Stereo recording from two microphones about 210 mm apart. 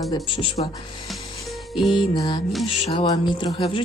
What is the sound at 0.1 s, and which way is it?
Speech, 25° left (ahead or behind).